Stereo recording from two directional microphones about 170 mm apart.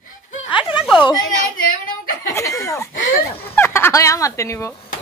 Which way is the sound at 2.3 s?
20° left (ahead or behind).